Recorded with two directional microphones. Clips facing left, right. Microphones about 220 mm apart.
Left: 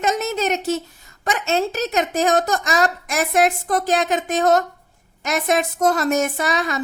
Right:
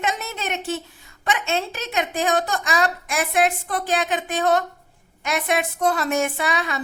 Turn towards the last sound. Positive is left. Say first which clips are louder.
# left 3 dB
turn(degrees=40)  # may be behind; listen again after turning